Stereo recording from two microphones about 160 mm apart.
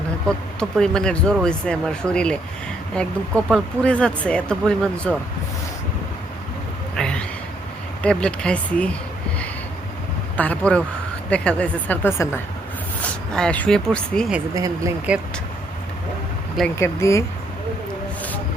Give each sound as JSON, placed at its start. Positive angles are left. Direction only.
{"t": 0.3, "sound": "speech", "side_deg": 5}
{"t": 6.9, "sound": "a sound", "side_deg": 5}
{"t": 8.0, "sound": "speech", "side_deg": 5}
{"t": 10.3, "sound": "speech", "side_deg": 10}
{"t": 14.5, "sound": "speech", "side_deg": -20}
{"t": 16.7, "sound": "speech", "side_deg": 20}